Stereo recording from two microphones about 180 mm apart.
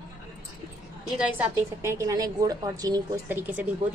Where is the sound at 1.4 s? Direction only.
15° right (ahead or behind).